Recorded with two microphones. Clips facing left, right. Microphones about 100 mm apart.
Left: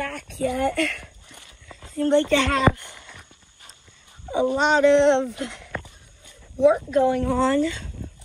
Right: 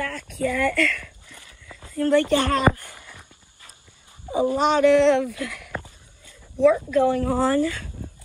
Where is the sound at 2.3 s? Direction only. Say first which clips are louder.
Even; 40° right (ahead or behind).